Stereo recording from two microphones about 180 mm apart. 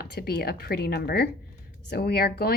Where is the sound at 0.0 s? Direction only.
60° left (ahead or behind).